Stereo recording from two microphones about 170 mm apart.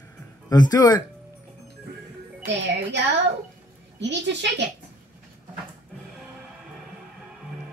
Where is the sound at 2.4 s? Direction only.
90° right.